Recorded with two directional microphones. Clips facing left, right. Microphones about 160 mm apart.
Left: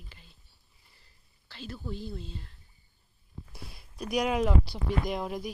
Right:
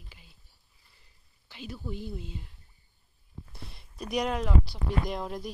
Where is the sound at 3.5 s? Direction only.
5° left (ahead or behind).